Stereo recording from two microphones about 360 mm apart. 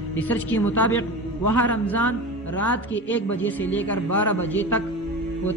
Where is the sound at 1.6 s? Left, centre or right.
Centre.